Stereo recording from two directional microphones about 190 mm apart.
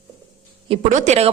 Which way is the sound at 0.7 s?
40° right (ahead or behind).